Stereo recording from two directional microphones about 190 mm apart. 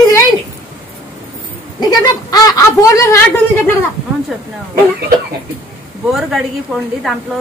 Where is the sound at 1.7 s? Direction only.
20° left (ahead or behind).